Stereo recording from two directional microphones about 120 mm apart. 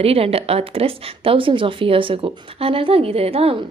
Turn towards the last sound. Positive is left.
turn(degrees=-55)  # may be behind; listen again after turning